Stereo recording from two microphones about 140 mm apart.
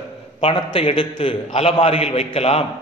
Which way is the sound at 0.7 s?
35° left (ahead or behind).